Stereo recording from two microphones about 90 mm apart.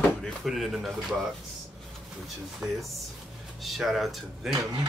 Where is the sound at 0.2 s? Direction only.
Centre (ahead or behind).